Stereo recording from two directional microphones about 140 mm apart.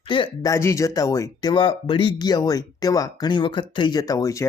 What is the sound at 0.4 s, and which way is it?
Speech, 20° left (ahead or behind).